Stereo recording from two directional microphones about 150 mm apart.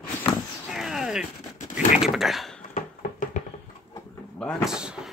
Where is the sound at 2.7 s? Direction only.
55° left (ahead or behind).